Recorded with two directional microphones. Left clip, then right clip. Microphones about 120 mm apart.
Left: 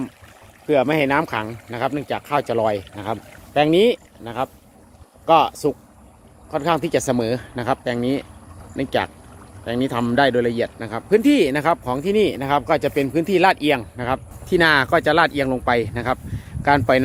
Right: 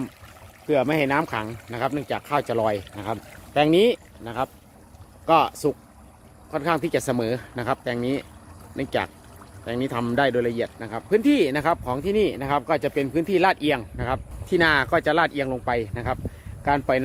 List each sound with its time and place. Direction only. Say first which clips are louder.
0.7 s speech: left 4 dB; 30° left (ahead or behind)
3.5 s speech: left 3 dB; 5° left (ahead or behind); by 17.0 s 35° left (ahead or behind)